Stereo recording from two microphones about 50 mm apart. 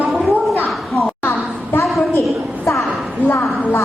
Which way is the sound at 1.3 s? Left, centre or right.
Left.